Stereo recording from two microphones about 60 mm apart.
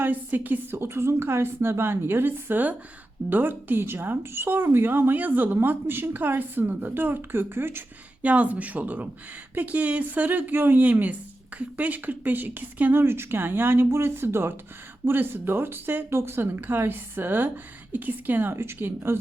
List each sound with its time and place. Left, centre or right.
0.0 s a woman's voice: right
8.2 s a woman's voice: right
18.5 s speech: right